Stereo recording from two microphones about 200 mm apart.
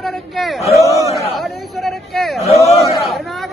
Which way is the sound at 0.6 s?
15° right (ahead or behind).